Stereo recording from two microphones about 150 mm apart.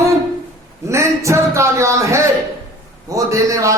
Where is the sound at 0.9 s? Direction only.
20° right (ahead or behind).